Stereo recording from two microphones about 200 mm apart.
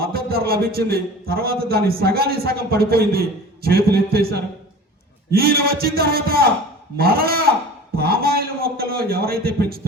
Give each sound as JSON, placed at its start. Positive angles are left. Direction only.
{"t": 0.0, "sound": "a man's voice", "side_deg": -50}